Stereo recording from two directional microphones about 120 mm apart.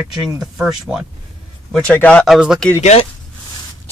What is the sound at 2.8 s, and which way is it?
Speech, 75° left (ahead or behind).